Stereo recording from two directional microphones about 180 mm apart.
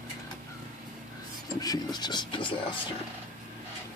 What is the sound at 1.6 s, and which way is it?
Speech, 20° left (ahead or behind).